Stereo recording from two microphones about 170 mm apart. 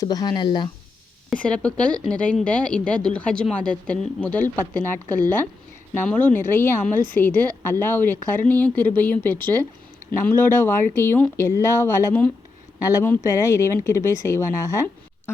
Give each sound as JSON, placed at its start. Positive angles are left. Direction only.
{"t": 0.0, "sound": "speech", "side_deg": 25}
{"t": 1.3, "sound": "a woman's voice", "side_deg": 5}
{"t": 5.9, "sound": "a woman's voice", "side_deg": 10}